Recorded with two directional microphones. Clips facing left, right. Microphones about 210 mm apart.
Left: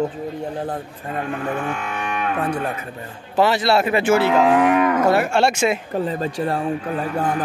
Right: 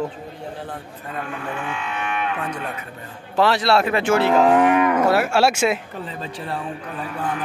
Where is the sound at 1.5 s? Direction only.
45° left (ahead or behind).